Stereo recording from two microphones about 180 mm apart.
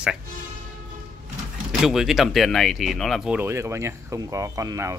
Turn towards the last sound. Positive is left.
turn(degrees=-15)  # may be behind; listen again after turning